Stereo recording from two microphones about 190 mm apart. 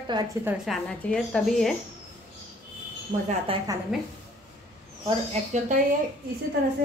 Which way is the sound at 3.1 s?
40° right (ahead or behind).